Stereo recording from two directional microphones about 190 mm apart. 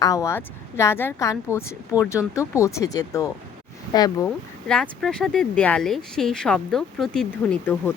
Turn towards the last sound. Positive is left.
turn(degrees=10)  # may be behind; listen again after turning